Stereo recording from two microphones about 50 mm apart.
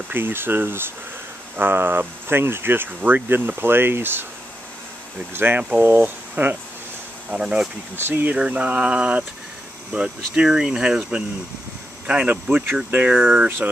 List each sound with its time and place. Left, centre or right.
0.1 s speech: right
5.3 s speech: right
7.2 s speech: centre
8.1 s speech: right; by 11.1 s centre
12.1 s speech: right